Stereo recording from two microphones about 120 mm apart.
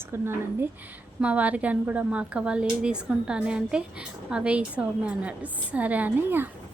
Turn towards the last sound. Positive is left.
turn(degrees=-15)  # may be behind; listen again after turning